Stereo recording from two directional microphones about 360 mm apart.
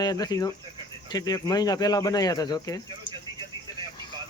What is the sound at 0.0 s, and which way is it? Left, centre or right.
Speech, centre.